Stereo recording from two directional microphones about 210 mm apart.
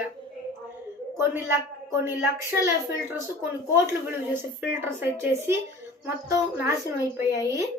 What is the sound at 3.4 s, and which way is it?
A woman's voice, 10° right (ahead or behind).